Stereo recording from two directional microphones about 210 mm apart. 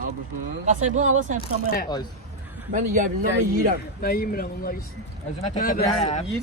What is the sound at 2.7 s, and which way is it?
Speech, 40° right (ahead or behind).